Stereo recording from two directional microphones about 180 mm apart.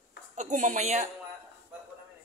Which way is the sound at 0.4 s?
45° right (ahead or behind).